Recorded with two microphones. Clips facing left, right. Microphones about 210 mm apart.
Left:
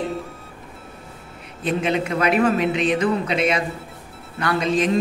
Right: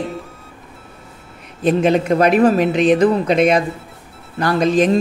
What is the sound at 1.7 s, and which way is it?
A woman's voice, 40° right (ahead or behind).